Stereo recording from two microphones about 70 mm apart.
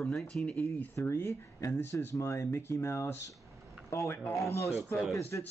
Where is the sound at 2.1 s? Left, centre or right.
Left.